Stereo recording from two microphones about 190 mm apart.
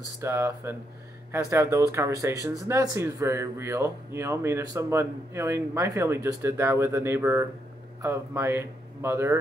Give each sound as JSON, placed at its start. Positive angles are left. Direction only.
{"t": 0.2, "sound": "speech", "side_deg": -15}